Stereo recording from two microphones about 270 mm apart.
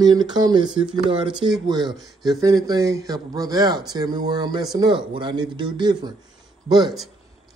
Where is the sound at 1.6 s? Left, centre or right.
Centre.